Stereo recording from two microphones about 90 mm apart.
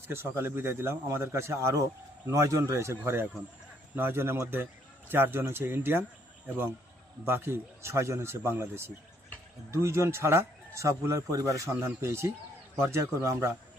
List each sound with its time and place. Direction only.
0.1 s a man's voice: 30° right (ahead or behind)
7.3 s a man's voice: 25° right (ahead or behind)